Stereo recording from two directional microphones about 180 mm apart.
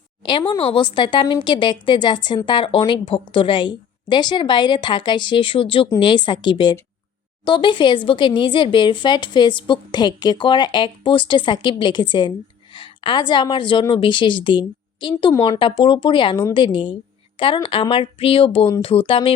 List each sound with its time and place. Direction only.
0.2 s speech: 25° left (ahead or behind)